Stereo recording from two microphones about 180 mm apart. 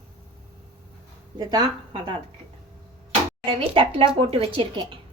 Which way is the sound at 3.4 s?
30° right (ahead or behind).